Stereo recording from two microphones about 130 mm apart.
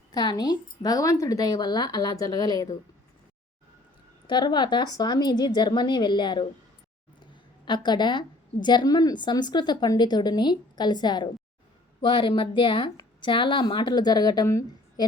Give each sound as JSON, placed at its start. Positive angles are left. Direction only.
{"t": 0.1, "sound": "a woman's voice", "side_deg": 30}
{"t": 4.3, "sound": "a woman's voice", "side_deg": 35}
{"t": 7.2, "sound": "a sound", "side_deg": 35}
{"t": 8.6, "sound": "a woman's voice", "side_deg": 35}